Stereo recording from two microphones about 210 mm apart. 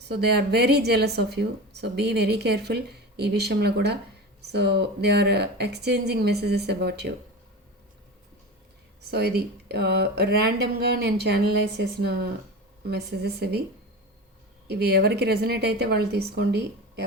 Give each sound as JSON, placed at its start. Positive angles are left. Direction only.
{"t": 0.1, "sound": "speech", "side_deg": -50}
{"t": 9.0, "sound": "speech", "side_deg": -50}
{"t": 14.7, "sound": "speech", "side_deg": -50}